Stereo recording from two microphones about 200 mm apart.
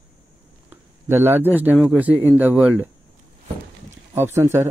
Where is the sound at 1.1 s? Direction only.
10° right (ahead or behind).